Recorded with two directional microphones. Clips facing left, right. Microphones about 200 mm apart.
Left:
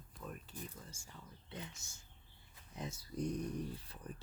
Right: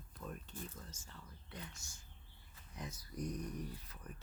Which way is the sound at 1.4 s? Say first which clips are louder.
Left 3 dB; 25° left (ahead or behind).